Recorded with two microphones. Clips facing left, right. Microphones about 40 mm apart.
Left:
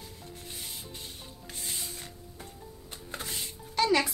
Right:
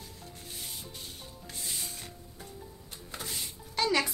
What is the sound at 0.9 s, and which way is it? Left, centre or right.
Music, left.